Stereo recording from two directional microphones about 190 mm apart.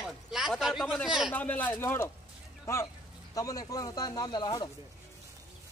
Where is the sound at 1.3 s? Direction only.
10° left (ahead or behind).